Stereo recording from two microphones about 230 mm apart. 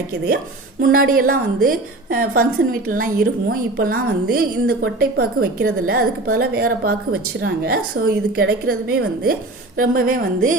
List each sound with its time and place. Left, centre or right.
0.8 s a woman's voice: right